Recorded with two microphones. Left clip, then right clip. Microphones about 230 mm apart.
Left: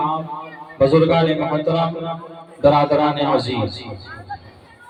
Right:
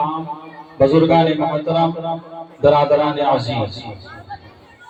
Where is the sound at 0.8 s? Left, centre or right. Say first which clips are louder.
Right 2 dB; left.